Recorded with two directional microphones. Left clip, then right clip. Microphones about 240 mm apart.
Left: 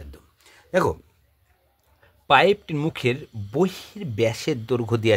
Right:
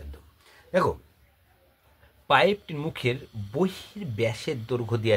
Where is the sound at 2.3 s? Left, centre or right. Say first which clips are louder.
Left 4 dB; left.